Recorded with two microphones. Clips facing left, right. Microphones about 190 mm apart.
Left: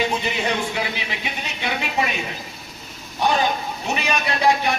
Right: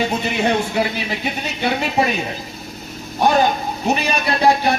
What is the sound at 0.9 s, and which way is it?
A man's voice, 40° right (ahead or behind).